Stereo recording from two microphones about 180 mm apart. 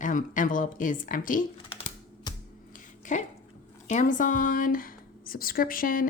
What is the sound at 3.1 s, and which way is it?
Speech, 45° left (ahead or behind).